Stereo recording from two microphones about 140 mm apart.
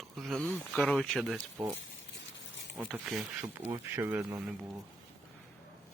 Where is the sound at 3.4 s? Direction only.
15° right (ahead or behind).